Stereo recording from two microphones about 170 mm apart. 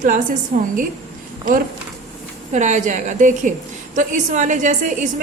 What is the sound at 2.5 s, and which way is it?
A woman's voice, 45° right (ahead or behind).